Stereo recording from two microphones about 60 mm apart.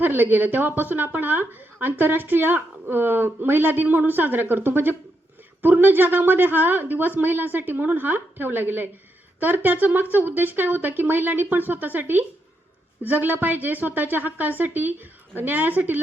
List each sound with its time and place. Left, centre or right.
0.0 s speech: right